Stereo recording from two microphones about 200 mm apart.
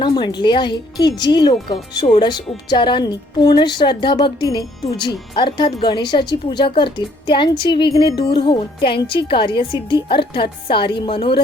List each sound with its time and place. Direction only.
0.0 s a woman's voice: 20° left (ahead or behind)